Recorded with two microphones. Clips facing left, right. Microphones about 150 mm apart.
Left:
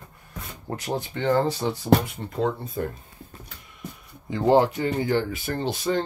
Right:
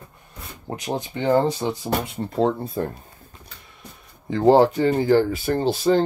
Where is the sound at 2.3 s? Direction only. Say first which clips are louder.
Right 5 dB; 35° right (ahead or behind).